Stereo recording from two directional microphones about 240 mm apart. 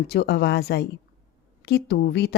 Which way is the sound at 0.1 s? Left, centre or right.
Left.